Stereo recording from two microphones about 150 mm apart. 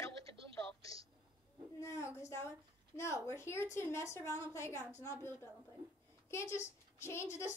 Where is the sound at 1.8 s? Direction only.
20° left (ahead or behind).